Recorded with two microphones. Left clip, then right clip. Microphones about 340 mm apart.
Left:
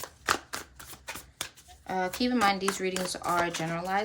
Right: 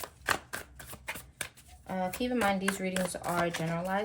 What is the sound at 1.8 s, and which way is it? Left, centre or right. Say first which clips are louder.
Speech: left 4 dB; centre.